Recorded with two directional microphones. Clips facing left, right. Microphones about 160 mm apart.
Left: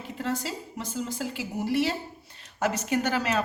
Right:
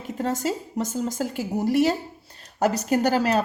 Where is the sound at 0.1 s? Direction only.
45° right (ahead or behind).